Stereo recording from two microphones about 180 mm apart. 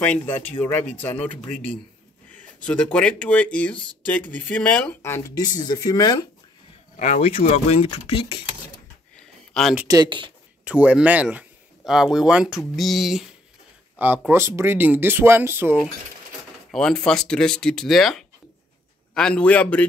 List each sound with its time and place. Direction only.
0.0 s speech: 10° left (ahead or behind)
7.0 s speech: 35° left (ahead or behind)
9.5 s speech: centre (ahead or behind)
9.8 s speech: 25° right (ahead or behind)
10.6 s speech: 5° right (ahead or behind)
16.7 s speech: 5° left (ahead or behind)